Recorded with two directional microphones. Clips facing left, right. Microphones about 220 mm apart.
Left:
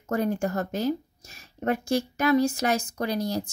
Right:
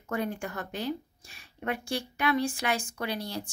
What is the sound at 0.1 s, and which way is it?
Speech, 40° left (ahead or behind).